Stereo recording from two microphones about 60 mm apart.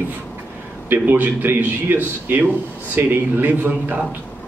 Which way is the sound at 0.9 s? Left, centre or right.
Right.